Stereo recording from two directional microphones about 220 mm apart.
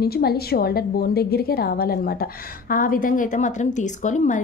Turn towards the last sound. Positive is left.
turn(degrees=35)  # may be behind; listen again after turning